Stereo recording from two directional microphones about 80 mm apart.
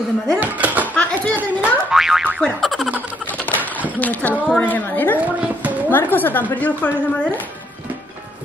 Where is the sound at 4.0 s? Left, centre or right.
Centre.